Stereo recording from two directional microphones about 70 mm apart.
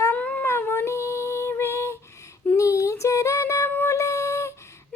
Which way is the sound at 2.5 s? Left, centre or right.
Left.